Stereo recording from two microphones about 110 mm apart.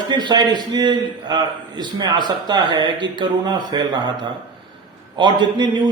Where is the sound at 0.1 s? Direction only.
40° right (ahead or behind).